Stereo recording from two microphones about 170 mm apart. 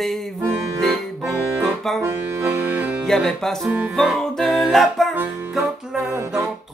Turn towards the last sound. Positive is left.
turn(degrees=-10)  # may be behind; listen again after turning